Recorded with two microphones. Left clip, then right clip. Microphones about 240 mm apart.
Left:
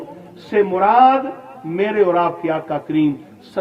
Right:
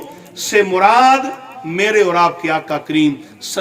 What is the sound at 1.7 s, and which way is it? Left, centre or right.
A man's voice, centre.